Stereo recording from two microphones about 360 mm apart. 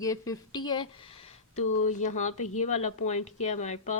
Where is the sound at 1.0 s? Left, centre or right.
Centre.